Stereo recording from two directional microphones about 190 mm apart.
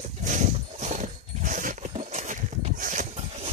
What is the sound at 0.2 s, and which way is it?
Wild animals, 40° right (ahead or behind).